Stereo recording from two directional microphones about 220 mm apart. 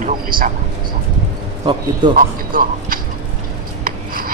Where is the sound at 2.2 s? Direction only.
40° right (ahead or behind).